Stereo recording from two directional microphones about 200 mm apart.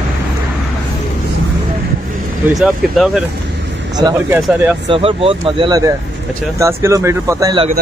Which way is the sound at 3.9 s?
15° right (ahead or behind).